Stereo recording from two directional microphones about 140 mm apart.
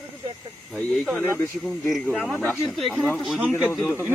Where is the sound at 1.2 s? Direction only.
20° left (ahead or behind).